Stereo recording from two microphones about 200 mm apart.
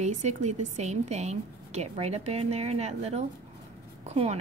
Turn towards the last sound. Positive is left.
turn(degrees=-35)  # may be behind; listen again after turning